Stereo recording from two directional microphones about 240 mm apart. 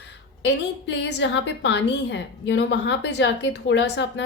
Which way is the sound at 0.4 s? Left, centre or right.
Left.